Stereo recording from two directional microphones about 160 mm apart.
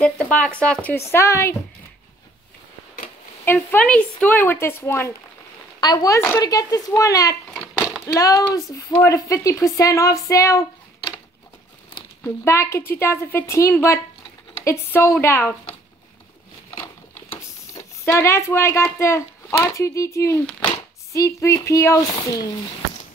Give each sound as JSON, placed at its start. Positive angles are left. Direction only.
{"t": 0.0, "sound": "a woman's voice", "side_deg": 5}
{"t": 3.4, "sound": "a woman's voice", "side_deg": 10}
{"t": 5.8, "sound": "speech", "side_deg": 25}
{"t": 12.2, "sound": "a woman's voice", "side_deg": 15}
{"t": 17.4, "sound": "speech", "side_deg": 15}